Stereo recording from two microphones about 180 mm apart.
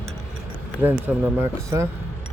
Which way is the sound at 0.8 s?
10° right (ahead or behind).